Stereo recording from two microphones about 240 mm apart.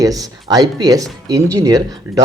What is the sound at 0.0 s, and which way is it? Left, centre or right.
Speech, centre.